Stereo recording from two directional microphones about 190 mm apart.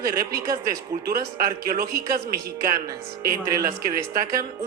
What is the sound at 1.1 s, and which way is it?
A man's voice, 50° right (ahead or behind).